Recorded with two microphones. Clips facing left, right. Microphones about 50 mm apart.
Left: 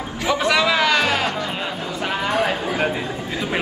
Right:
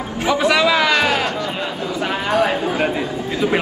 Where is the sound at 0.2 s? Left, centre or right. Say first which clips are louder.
Right 3 dB; right.